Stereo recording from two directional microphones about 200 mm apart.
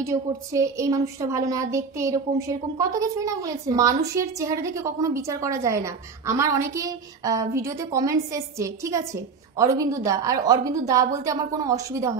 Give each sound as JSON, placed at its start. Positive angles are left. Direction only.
{"t": 0.0, "sound": "a woman's voice", "side_deg": -15}